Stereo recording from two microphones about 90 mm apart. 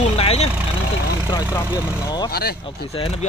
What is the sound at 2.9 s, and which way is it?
Speech, 90° left.